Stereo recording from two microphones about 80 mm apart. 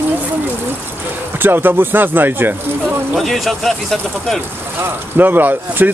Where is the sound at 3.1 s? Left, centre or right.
Centre.